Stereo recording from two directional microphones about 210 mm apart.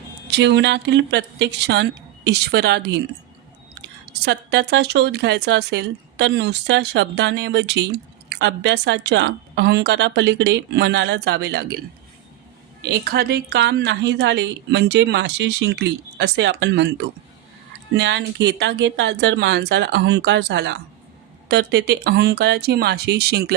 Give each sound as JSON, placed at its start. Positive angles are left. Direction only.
{"t": 0.3, "sound": "a woman's voice", "side_deg": -55}
{"t": 4.1, "sound": "a woman's voice", "side_deg": -50}
{"t": 12.8, "sound": "a woman's voice", "side_deg": -45}